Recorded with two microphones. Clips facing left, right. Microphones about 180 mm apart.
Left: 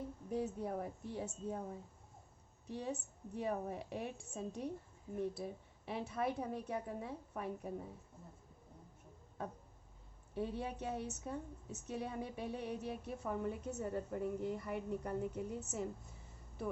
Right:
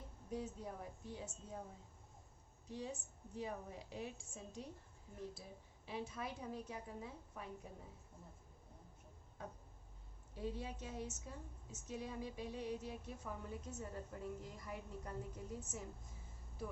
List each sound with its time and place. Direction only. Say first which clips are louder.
0.3 s a woman's voice: left 6 dB; 60° left (ahead or behind)
2.6 s a woman's voice: left 5 dB; 65° left (ahead or behind)
10.3 s a woman's voice: left 5 dB; 60° left (ahead or behind)